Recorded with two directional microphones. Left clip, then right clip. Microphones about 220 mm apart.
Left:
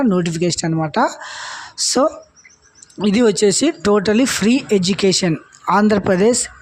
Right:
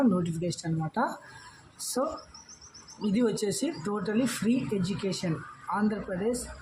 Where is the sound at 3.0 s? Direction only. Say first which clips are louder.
Left 14 dB; 40° left (ahead or behind).